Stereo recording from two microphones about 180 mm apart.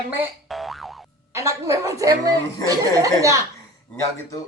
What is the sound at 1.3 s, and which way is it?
A woman's voice, 15° right (ahead or behind).